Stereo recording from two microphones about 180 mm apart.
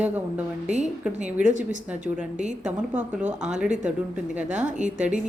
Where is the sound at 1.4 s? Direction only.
45° right (ahead or behind).